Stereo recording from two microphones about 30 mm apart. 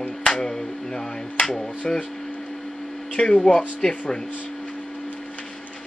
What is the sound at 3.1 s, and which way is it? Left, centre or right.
Speech, left.